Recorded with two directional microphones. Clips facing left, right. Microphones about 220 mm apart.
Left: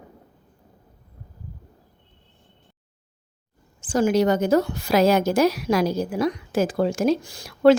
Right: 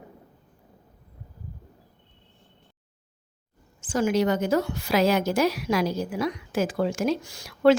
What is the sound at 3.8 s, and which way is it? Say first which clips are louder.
Speech: left 4 dB; 35° left (ahead or behind).